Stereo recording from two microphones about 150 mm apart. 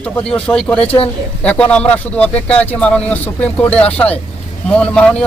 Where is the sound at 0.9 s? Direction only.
40° left (ahead or behind).